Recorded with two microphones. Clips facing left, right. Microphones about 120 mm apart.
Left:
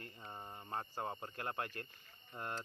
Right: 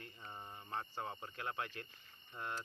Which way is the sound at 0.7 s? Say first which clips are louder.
Left 2 dB; 40° left (ahead or behind).